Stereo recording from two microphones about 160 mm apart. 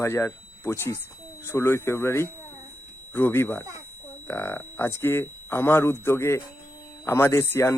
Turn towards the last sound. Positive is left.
turn(degrees=15)  # may be behind; listen again after turning